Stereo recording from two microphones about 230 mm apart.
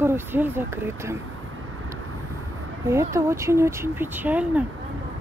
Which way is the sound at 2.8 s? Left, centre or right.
Centre.